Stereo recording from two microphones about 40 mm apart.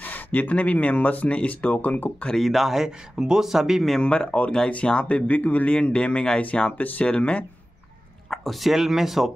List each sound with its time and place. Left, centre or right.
0.0 s speech: left
2.3 s speech: centre
4.0 s speech: left
5.8 s speech: left
6.8 s speech: left
7.1 s speech: left
8.3 s speech: centre